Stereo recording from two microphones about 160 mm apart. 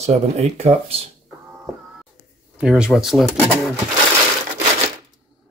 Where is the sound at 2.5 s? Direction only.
5° right (ahead or behind).